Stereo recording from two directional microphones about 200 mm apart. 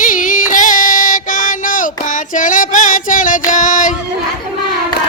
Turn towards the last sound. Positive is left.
turn(degrees=40)  # may be behind; listen again after turning